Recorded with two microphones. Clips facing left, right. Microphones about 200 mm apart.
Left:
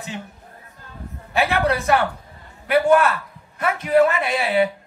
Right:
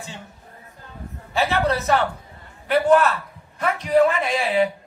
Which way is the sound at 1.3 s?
15° left (ahead or behind).